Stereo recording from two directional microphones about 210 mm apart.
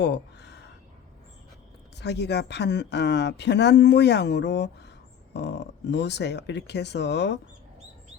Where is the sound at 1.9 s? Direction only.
55° left (ahead or behind).